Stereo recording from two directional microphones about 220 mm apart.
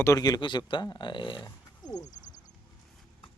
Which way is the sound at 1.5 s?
20° left (ahead or behind).